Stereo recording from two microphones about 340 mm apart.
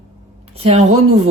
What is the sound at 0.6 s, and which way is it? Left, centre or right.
Speech, centre.